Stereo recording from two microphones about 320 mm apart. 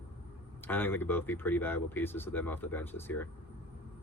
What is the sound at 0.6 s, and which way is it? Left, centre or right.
Speech, centre.